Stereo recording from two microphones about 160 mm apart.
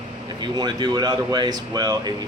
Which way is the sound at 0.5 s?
25° right (ahead or behind).